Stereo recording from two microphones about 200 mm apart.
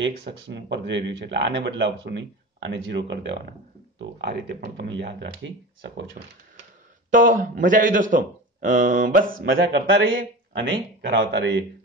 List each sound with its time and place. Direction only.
0.0 s speech: 60° right (ahead or behind)
7.1 s a man's voice: 40° right (ahead or behind); by 11.6 s 65° right (ahead or behind)